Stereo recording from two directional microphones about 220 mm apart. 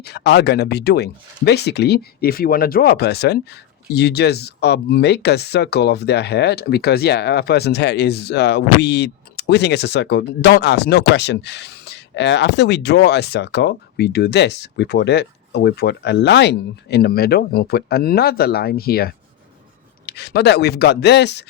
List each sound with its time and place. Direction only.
0.0 s speech: 50° left (ahead or behind)